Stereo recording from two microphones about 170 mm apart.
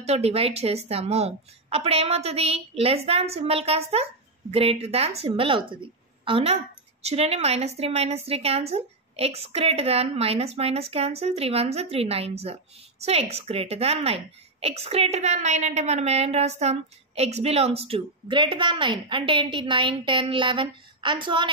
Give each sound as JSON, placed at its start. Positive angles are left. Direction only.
{"t": 0.0, "sound": "a woman's voice", "side_deg": -40}